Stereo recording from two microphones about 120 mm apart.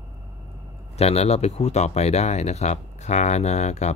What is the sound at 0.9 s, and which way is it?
Speech, 60° left (ahead or behind).